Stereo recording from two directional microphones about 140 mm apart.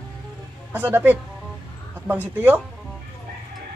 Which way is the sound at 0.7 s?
10° right (ahead or behind).